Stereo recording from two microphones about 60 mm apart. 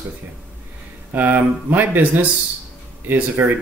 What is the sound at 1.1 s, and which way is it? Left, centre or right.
Speech, right.